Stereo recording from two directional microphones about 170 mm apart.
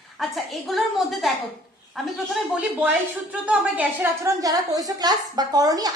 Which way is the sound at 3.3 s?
10° right (ahead or behind).